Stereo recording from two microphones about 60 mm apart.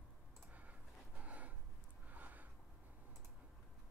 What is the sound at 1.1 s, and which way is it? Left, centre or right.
Gasp, right.